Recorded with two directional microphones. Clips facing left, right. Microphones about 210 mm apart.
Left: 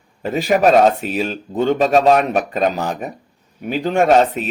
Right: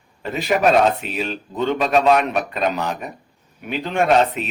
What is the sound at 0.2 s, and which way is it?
Speech, 45° left (ahead or behind).